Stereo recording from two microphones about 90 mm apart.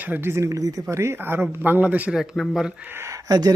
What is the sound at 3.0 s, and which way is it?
Speech, 40° right (ahead or behind).